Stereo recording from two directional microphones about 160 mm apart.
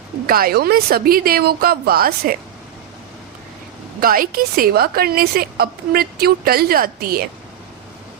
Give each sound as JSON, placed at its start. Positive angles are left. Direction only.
{"t": 0.3, "sound": "a woman's voice", "side_deg": -70}
{"t": 4.0, "sound": "a woman's voice", "side_deg": -65}